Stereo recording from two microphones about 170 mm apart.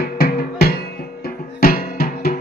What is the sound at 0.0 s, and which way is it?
Music, 65° left (ahead or behind).